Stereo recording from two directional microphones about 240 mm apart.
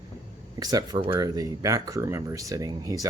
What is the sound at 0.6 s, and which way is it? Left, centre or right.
Speech, centre.